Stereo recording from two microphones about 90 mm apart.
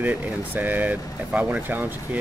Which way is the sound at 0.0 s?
20° right (ahead or behind).